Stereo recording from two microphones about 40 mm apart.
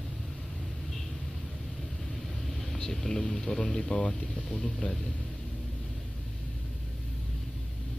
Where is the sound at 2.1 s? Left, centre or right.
Centre.